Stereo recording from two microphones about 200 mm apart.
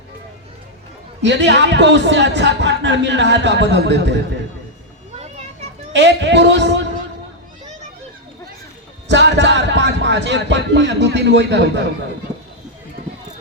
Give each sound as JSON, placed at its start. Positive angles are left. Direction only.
{"t": 1.2, "sound": "a man's voice", "side_deg": -60}
{"t": 5.9, "sound": "a man's voice", "side_deg": -60}
{"t": 9.0, "sound": "a man's voice", "side_deg": -60}